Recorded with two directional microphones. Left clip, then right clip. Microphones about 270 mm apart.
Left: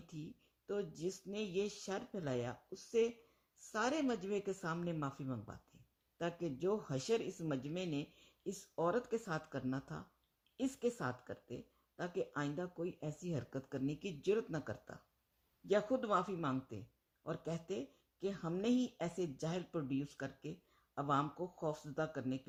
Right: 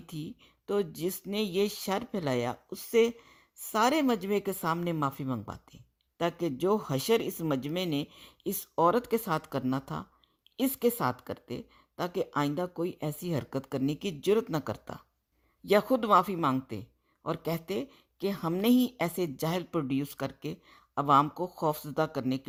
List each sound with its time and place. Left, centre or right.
0.1 s a woman's voice: right